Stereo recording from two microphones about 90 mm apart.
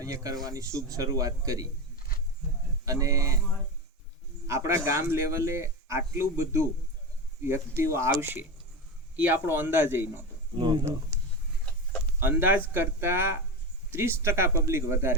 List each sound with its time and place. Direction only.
0.0 s speech: 40° right (ahead or behind)
2.8 s speech: 40° right (ahead or behind)
4.4 s speech: 30° right (ahead or behind)
10.6 s speech: 55° right (ahead or behind)
12.2 s speech: 20° right (ahead or behind)